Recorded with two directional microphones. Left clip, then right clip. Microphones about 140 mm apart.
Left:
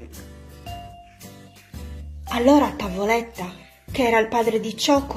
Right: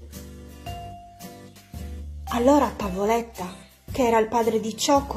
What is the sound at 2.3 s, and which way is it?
Speech, 10° right (ahead or behind).